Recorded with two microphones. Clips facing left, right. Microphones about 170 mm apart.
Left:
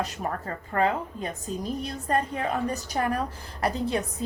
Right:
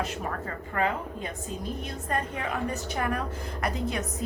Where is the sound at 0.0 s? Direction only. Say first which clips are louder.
Left 1 dB; 35° left (ahead or behind).